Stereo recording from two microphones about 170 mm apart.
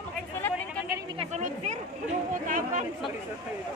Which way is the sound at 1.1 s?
40° right (ahead or behind).